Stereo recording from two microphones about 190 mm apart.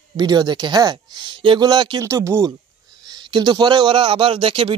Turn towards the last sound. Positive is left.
turn(degrees=-30)  # may be behind; listen again after turning